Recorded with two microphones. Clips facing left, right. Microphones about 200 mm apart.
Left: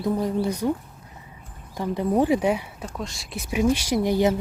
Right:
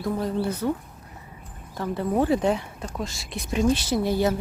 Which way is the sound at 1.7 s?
15° left (ahead or behind).